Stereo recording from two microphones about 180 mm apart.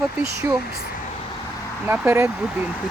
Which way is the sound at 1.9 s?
15° right (ahead or behind).